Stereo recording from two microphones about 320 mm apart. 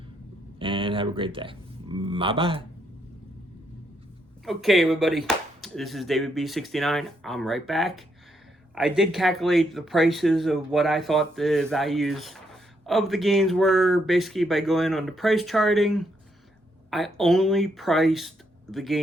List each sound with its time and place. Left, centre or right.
0.6 s speech: centre
4.4 s speech: centre